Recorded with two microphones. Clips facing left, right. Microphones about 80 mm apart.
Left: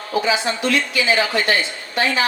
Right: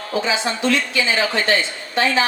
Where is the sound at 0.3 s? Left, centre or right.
Right.